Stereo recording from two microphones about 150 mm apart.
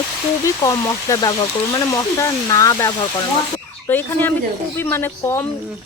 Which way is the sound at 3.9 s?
15° left (ahead or behind).